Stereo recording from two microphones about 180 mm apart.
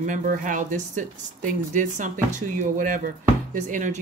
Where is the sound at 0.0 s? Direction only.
45° right (ahead or behind).